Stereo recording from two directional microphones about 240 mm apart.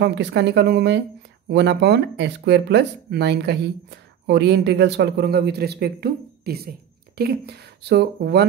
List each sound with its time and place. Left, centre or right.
0.0 s speech: right